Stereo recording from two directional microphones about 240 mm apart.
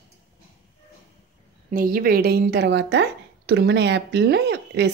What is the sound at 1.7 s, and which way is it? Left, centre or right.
A woman's voice, right.